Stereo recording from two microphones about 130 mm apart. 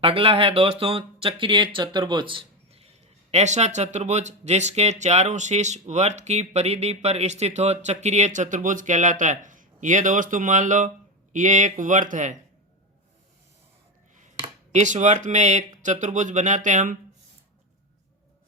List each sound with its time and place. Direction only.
0.0 s speech: 45° right (ahead or behind); by 12.4 s 75° right (ahead or behind)
14.7 s speech: 65° right (ahead or behind)